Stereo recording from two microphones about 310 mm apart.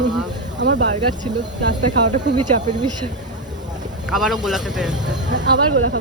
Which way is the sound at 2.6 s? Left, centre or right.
Centre.